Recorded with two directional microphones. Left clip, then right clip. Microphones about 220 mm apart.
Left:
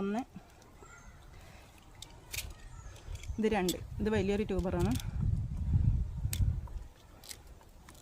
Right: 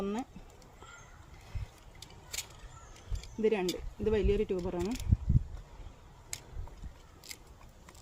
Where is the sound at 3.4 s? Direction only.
50° left (ahead or behind).